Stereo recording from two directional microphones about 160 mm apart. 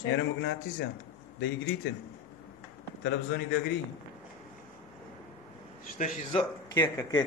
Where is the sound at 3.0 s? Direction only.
90° left.